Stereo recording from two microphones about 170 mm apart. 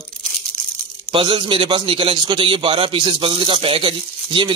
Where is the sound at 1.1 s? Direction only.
30° right (ahead or behind).